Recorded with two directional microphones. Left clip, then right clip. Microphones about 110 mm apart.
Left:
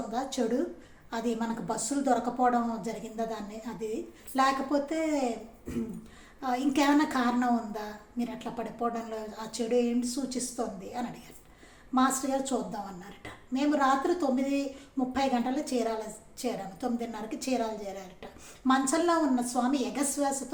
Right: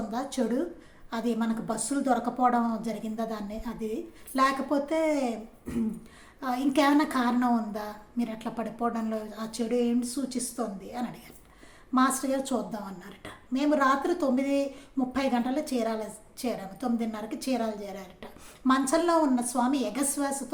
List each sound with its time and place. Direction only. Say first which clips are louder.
0.1 s a woman's voice: even; 30° right (ahead or behind)